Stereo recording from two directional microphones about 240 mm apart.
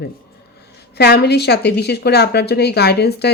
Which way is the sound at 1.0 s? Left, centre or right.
Left.